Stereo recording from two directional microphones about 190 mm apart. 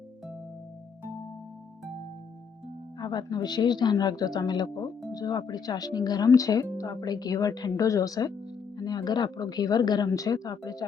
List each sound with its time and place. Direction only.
3.0 s speech: 20° left (ahead or behind)